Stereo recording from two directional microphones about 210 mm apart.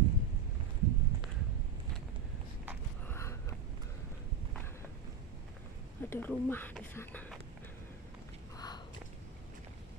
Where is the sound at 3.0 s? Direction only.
10° left (ahead or behind).